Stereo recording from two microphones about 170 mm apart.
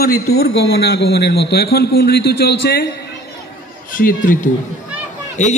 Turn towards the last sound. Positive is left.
turn(degrees=45)  # may be behind; listen again after turning